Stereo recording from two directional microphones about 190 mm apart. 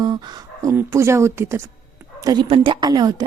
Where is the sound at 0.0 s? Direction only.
20° right (ahead or behind).